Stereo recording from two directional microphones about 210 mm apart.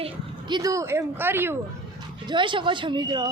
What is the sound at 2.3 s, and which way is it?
Speech, 25° right (ahead or behind).